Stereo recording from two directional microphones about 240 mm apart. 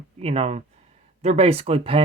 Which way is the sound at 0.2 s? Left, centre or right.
Right.